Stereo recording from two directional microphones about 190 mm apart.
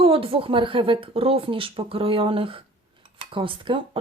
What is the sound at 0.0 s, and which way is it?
Speech, 30° right (ahead or behind).